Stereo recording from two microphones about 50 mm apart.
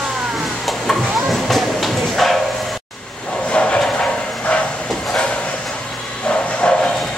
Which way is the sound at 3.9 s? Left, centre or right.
Left.